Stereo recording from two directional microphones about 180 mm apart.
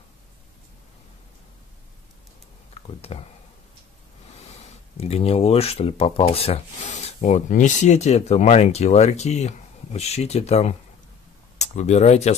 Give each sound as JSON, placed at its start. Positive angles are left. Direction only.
{"t": 3.1, "sound": "speech", "side_deg": 35}
{"t": 4.9, "sound": "speech", "side_deg": 35}